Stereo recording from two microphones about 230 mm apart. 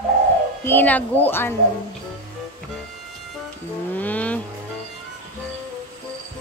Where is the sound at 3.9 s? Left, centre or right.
Centre.